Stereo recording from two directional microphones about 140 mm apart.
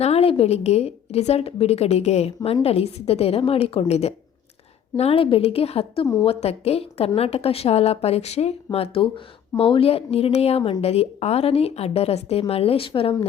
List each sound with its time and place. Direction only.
0.0 s speech: 45° left (ahead or behind)